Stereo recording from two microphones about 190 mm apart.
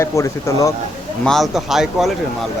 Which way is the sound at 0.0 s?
15° left (ahead or behind).